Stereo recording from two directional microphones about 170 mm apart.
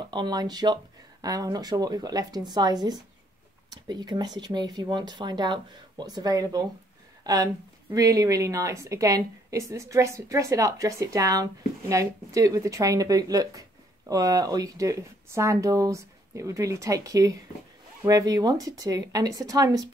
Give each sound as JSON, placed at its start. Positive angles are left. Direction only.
{"t": 0.0, "sound": "speech", "side_deg": -25}